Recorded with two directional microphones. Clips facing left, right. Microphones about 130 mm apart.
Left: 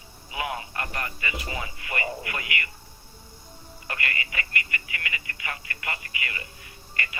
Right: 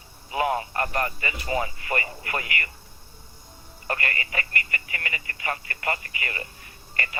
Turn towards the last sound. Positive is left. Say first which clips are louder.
# right 2 dB
turn(degrees=-40)  # may be behind; listen again after turning